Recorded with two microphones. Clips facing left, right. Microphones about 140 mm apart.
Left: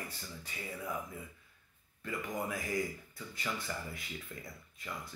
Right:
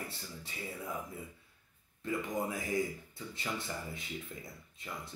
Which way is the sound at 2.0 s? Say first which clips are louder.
Right 3 dB; 25° right (ahead or behind).